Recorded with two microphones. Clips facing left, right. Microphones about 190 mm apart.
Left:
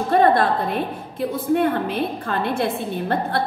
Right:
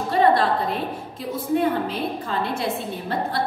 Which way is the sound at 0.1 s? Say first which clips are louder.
Left 2 dB; 50° left (ahead or behind).